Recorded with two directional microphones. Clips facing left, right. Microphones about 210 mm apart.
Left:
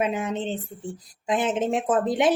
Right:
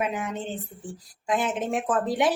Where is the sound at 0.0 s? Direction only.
25° left (ahead or behind).